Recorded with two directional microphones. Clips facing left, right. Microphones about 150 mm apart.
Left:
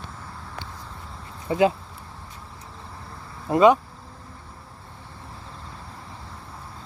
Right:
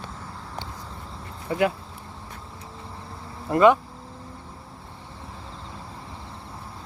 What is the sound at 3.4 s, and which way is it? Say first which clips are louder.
Speech: left 1 dB; 20° left (ahead or behind).